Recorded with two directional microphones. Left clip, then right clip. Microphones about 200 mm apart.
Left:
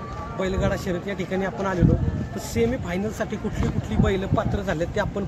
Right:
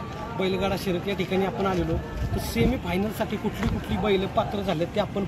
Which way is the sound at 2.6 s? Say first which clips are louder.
Left 2 dB; 45° left (ahead or behind).